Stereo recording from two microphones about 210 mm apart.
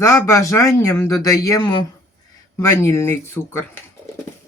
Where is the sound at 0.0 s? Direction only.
15° left (ahead or behind).